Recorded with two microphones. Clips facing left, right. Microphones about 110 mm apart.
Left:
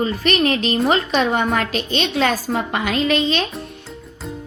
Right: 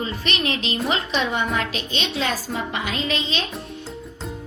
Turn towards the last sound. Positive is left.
turn(degrees=55)  # may be behind; listen again after turning